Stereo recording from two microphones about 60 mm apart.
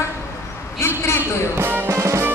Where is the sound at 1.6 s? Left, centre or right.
Right.